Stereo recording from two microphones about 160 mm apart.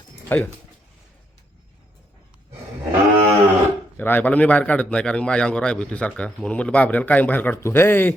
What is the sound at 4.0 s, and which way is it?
A man's voice, 10° left (ahead or behind).